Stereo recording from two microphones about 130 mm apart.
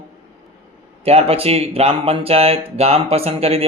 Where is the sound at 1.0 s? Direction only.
50° right (ahead or behind).